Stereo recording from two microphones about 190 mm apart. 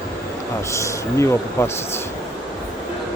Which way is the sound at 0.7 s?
15° left (ahead or behind).